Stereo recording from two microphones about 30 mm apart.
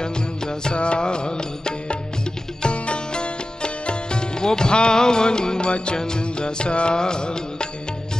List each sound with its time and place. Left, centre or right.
0.0 s music: left
2.6 s music: left